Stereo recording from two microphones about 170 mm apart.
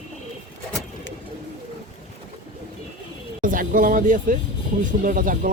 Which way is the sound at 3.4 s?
55° right (ahead or behind).